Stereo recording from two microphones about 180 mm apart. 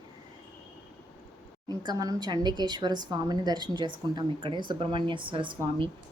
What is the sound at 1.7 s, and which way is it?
Speech, 20° right (ahead or behind).